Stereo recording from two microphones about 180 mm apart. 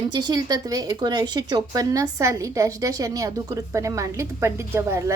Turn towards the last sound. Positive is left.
turn(degrees=-15)  # may be behind; listen again after turning